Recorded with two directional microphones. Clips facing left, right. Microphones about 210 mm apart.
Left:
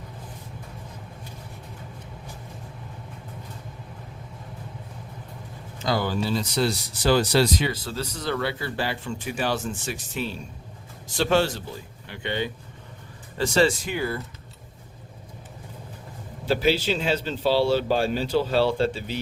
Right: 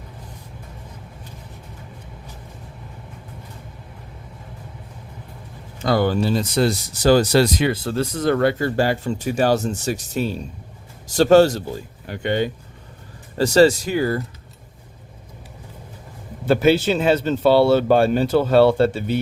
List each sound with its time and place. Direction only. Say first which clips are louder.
5.8 s speech: right 7 dB; 60° right (ahead or behind); by 14.2 s 40° right (ahead or behind)
16.5 s speech: right 6 dB; 50° right (ahead or behind)